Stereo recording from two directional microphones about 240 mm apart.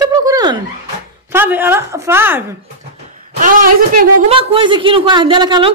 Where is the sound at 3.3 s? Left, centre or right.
Right.